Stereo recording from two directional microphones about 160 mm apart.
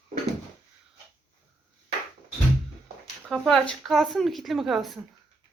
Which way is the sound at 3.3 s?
5° left (ahead or behind).